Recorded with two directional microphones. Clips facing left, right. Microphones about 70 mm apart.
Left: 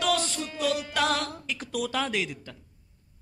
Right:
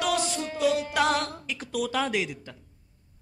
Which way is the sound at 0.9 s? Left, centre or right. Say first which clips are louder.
Right 2 dB; centre.